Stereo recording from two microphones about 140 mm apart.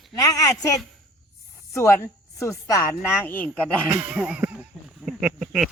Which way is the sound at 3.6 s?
10° right (ahead or behind).